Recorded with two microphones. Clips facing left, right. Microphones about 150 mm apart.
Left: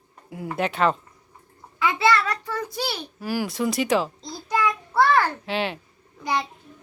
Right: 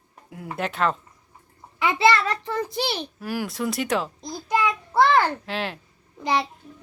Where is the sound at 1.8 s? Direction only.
25° right (ahead or behind).